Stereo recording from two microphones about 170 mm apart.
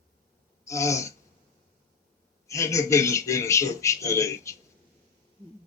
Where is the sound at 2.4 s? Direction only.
20° left (ahead or behind).